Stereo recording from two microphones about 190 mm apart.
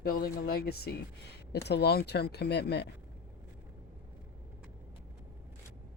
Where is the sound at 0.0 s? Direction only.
50° left (ahead or behind).